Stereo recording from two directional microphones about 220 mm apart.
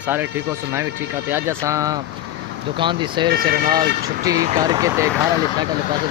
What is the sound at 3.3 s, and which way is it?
Speech, 45° right (ahead or behind).